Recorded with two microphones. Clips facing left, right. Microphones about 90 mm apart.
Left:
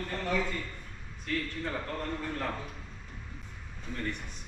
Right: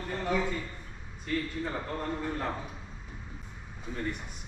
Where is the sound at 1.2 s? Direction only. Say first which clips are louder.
Right 2 dB; 10° right (ahead or behind).